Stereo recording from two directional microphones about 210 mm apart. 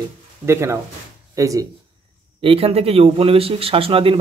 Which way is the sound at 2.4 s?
25° right (ahead or behind).